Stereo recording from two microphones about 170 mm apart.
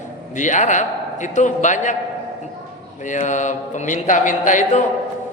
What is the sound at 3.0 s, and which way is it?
A man's voice, 45° left (ahead or behind).